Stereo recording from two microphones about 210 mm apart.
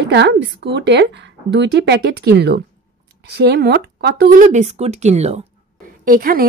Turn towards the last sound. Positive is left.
turn(degrees=-45)  # may be behind; listen again after turning